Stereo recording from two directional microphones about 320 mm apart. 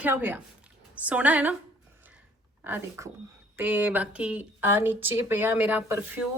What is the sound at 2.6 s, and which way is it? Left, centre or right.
Speech, centre.